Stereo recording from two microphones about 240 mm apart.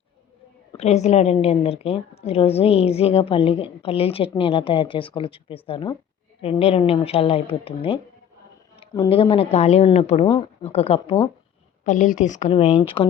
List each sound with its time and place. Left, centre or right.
0.7 s a woman's voice: left